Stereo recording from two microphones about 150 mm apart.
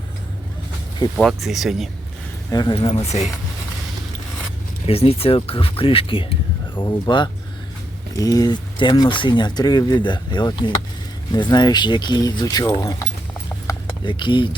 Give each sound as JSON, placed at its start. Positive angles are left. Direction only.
{"t": 1.1, "sound": "speech", "side_deg": 0}
{"t": 2.5, "sound": "speech", "side_deg": 25}
{"t": 4.9, "sound": "speech", "side_deg": 40}
{"t": 13.7, "sound": "a sound", "side_deg": 30}